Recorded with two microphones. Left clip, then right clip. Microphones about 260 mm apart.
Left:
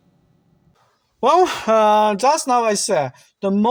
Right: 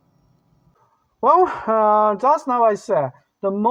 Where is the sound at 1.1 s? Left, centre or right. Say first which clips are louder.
Even; left.